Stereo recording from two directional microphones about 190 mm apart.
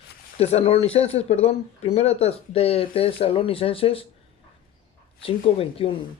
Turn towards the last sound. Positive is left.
turn(degrees=30)  # may be behind; listen again after turning